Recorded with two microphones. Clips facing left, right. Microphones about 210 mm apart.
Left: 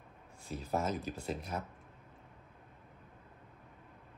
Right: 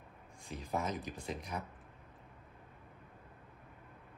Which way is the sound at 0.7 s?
15° right (ahead or behind).